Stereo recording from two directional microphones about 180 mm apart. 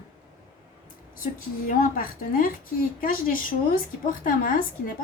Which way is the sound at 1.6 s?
50° left (ahead or behind).